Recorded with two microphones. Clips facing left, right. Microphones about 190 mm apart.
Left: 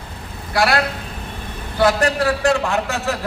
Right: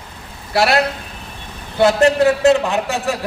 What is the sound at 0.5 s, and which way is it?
A man's voice, 25° right (ahead or behind).